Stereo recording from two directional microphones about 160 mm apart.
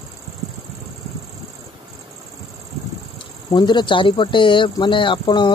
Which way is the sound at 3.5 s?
30° left (ahead or behind).